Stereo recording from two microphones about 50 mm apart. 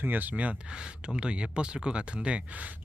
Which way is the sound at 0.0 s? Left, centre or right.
Right.